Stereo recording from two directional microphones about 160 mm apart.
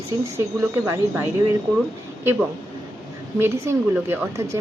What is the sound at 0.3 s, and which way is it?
Speech, 15° right (ahead or behind).